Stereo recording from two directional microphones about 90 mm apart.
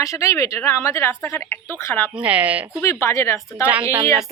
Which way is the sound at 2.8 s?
30° left (ahead or behind).